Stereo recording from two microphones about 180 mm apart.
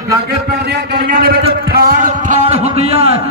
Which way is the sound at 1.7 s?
55° right (ahead or behind).